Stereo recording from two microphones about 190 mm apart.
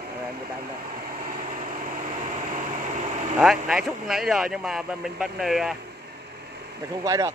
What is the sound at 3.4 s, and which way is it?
Speech, 5° right (ahead or behind).